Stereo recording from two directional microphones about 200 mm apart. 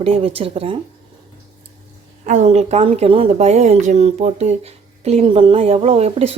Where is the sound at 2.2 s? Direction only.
35° right (ahead or behind).